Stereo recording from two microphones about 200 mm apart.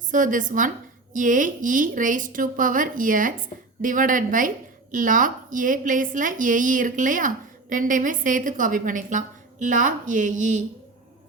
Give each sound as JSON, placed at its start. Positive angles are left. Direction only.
{"t": 0.1, "sound": "a woman's voice", "side_deg": -40}